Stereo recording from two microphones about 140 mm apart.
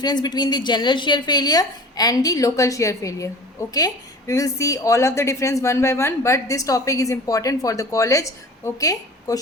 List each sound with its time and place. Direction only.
0.0 s a woman's voice: 30° left (ahead or behind)